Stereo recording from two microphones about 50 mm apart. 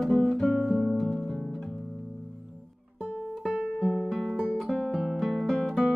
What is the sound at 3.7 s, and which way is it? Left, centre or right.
Music, centre.